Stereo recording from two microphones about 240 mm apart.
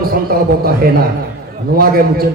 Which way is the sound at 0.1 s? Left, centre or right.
Right.